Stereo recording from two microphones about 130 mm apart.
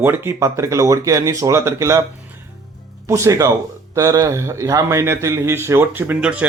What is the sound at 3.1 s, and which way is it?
Speech, 25° right (ahead or behind).